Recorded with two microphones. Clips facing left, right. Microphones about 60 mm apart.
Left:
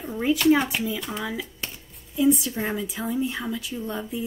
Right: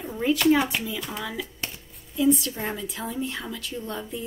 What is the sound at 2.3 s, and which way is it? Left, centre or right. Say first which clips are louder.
A woman's voice: left 1 dB; centre.